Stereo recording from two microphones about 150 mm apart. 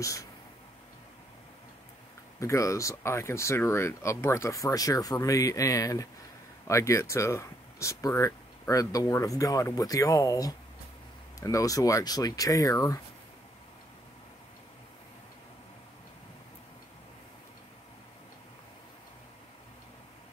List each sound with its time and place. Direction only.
0.0 s speech: 20° left (ahead or behind)
2.4 s speech: 20° left (ahead or behind)